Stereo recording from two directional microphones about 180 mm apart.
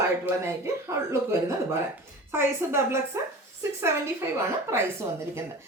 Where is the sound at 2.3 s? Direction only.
15° right (ahead or behind).